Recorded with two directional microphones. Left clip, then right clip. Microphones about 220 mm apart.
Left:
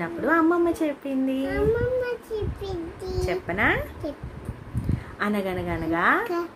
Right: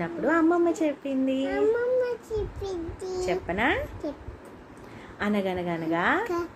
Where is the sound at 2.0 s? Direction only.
5° right (ahead or behind).